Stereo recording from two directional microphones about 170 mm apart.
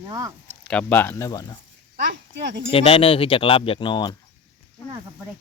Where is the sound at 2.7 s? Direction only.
35° left (ahead or behind).